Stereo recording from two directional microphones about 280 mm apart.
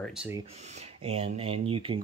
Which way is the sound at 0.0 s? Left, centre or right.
Centre.